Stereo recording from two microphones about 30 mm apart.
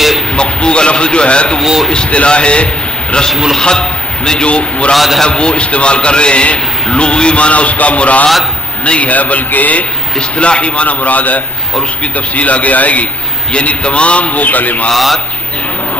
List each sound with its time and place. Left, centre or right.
0.4 s a man's voice: left
3.6 s speech: left
4.5 s a man's voice: left
4.9 s speech: centre
5.2 s a man's voice: left
8.8 s a man's voice: left
9.1 s a man's voice: left
10.3 s a man's voice: left
10.9 s a man's voice: left
12.0 s a man's voice: left
13.8 s a man's voice: left
14.9 s speech: centre